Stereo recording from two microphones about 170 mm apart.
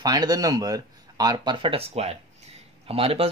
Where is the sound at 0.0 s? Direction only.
20° right (ahead or behind).